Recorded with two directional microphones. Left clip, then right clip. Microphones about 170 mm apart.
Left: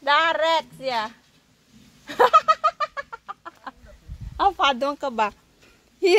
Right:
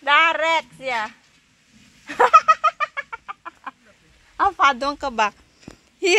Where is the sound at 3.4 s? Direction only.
15° right (ahead or behind).